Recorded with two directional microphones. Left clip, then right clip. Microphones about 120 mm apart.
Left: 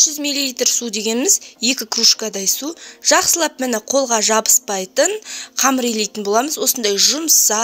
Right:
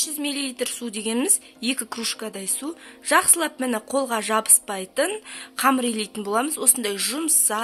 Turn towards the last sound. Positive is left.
turn(degrees=35)  # may be behind; listen again after turning